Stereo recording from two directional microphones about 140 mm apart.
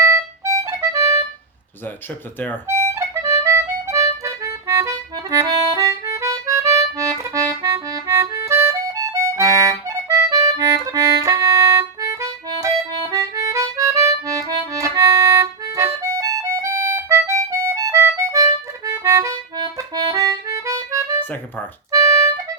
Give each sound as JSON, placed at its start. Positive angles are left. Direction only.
{"t": 0.1, "sound": "music", "side_deg": -20}
{"t": 2.6, "sound": "music", "side_deg": -20}
{"t": 6.7, "sound": "accordion", "side_deg": -20}
{"t": 21.9, "sound": "harmonica", "side_deg": -25}